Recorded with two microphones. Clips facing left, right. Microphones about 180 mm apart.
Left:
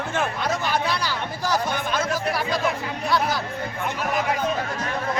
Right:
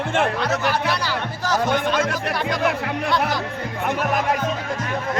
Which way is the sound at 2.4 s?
65° right (ahead or behind).